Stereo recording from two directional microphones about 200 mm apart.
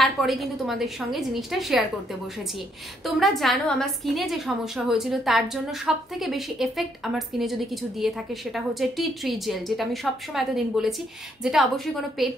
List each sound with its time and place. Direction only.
0.0 s a woman's voice: centre (ahead or behind)
3.2 s a woman's voice: centre (ahead or behind)